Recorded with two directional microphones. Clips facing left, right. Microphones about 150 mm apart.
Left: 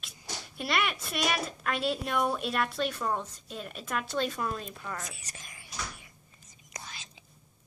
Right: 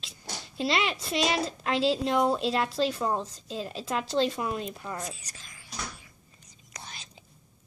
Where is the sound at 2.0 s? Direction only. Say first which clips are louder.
Right 5 dB; 25° right (ahead or behind).